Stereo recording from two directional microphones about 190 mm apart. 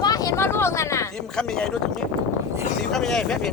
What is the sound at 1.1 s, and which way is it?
Speech, 5° left (ahead or behind).